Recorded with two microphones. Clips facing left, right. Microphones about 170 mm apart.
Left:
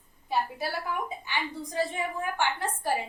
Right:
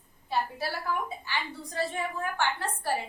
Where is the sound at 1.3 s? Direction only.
20° left (ahead or behind).